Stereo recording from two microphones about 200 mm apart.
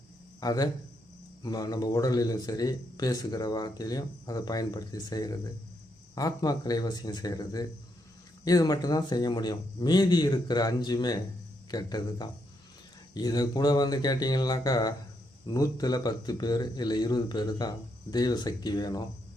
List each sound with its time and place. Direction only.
0.3 s speech: 20° left (ahead or behind)